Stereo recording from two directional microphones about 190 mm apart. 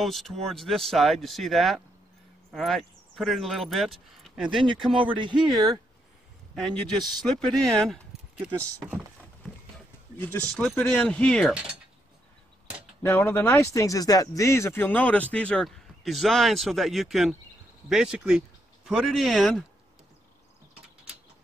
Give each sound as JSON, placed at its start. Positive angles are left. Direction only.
{"t": 0.0, "sound": "speech", "side_deg": 0}
{"t": 5.5, "sound": "speech", "side_deg": -20}
{"t": 6.5, "sound": "a man's voice", "side_deg": 5}
{"t": 8.5, "sound": "speech", "side_deg": -10}
{"t": 10.1, "sound": "speech", "side_deg": 10}
{"t": 13.0, "sound": "speech", "side_deg": 15}